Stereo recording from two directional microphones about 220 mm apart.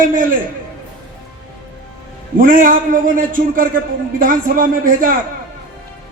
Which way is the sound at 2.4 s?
40° right (ahead or behind).